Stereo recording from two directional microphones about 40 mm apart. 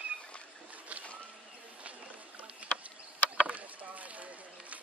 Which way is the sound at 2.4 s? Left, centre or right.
Right.